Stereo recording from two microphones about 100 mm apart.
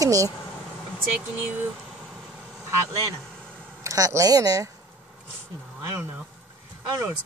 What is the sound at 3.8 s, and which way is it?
Speech, 35° right (ahead or behind).